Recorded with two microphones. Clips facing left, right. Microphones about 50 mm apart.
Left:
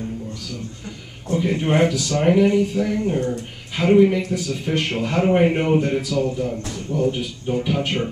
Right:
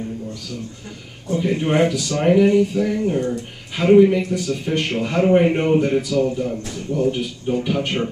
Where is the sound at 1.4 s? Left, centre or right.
Centre.